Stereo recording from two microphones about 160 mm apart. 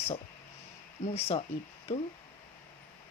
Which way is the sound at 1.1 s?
40° left (ahead or behind).